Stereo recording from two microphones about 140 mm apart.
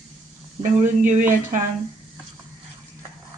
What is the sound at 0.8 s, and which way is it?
Speech, 60° right (ahead or behind).